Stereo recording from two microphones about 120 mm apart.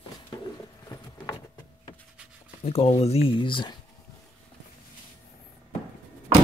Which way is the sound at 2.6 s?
60° left (ahead or behind).